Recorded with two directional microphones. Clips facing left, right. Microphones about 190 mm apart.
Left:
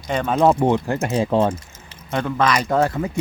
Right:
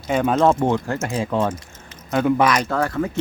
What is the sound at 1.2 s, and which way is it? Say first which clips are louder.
Speech: left 4 dB; 30° left (ahead or behind).